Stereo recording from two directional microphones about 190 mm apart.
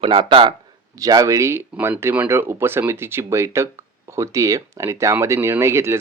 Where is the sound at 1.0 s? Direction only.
20° right (ahead or behind).